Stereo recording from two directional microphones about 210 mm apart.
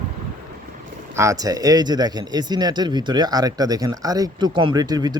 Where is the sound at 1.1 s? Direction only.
15° right (ahead or behind).